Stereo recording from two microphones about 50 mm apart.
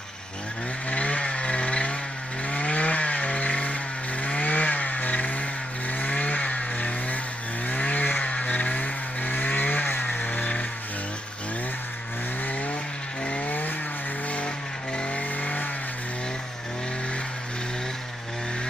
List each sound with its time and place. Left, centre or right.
0.8 s a sound: left
2.5 s vehicle: left
13.2 s vehicle: left
15.0 s vehicle: left